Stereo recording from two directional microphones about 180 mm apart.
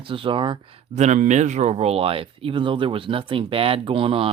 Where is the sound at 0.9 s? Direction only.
40° right (ahead or behind).